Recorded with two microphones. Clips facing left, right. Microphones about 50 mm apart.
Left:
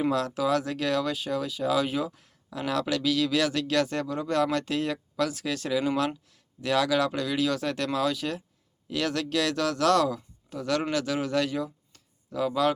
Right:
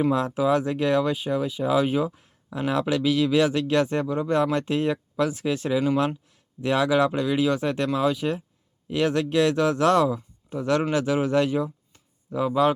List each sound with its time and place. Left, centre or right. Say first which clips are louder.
0.1 s speech: right 4 dB; right